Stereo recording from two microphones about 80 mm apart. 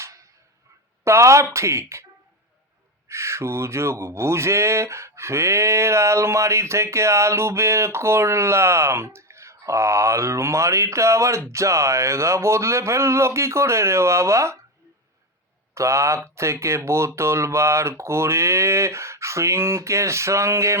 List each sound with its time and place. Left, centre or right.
1.0 s speech: right
3.1 s speech: right
15.7 s speech: right